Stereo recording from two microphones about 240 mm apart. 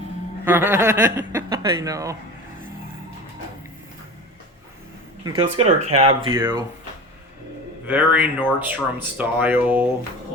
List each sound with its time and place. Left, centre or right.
0.4 s speech: centre
5.2 s speech: centre
6.3 s speech: centre
7.9 s speech: centre